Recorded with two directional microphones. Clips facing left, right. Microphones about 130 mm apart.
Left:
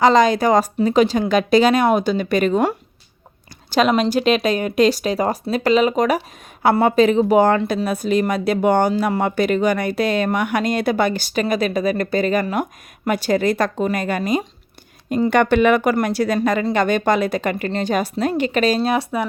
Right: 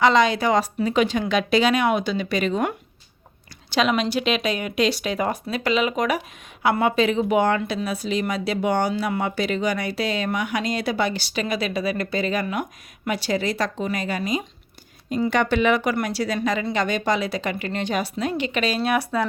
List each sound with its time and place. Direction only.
0.0 s speech: 40° left (ahead or behind)